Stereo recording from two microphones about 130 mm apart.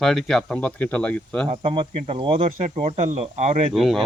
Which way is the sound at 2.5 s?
55° right (ahead or behind).